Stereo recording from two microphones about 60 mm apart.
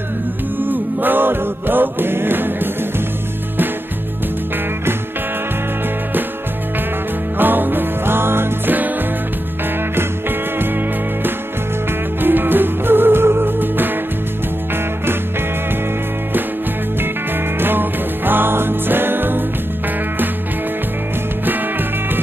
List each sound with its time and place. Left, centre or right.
0.6 s music: right
7.3 s music: right
12.2 s music: right
17.6 s music: right